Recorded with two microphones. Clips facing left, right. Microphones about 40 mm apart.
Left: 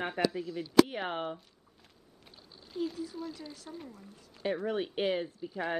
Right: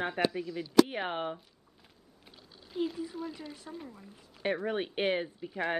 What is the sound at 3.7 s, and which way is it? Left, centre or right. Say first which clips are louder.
Speech: right 1 dB; centre.